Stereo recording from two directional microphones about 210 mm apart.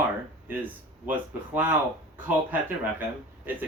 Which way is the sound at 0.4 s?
10° right (ahead or behind).